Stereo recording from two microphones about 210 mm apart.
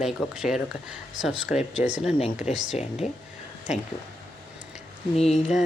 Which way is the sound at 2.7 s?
35° left (ahead or behind).